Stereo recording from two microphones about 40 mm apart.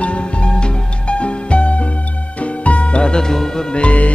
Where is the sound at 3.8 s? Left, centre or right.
Left.